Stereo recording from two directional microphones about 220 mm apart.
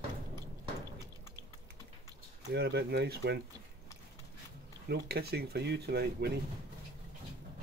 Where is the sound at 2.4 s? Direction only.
50° right (ahead or behind).